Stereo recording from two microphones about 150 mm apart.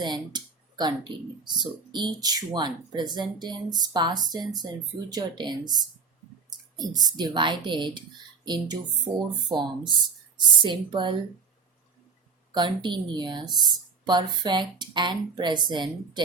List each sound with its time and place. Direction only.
0.0 s a woman's voice: 30° right (ahead or behind)
12.5 s a woman's voice: 30° right (ahead or behind)